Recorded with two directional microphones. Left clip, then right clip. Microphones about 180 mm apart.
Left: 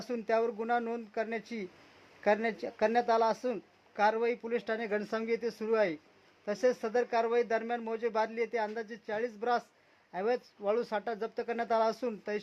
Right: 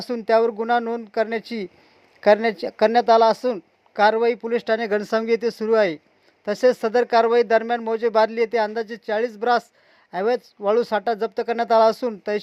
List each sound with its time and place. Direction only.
0.0 s speech: 35° right (ahead or behind)